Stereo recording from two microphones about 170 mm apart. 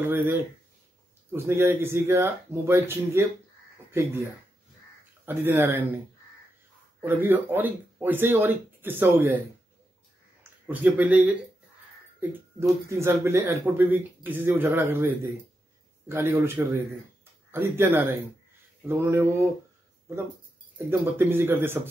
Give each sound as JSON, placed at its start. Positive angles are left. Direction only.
{"t": 1.3, "sound": "speech", "side_deg": -15}
{"t": 7.0, "sound": "speech", "side_deg": -10}
{"t": 10.7, "sound": "speech", "side_deg": -10}
{"t": 20.7, "sound": "speech", "side_deg": -15}